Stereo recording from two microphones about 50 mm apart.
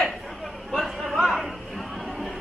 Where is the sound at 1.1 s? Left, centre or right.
Centre.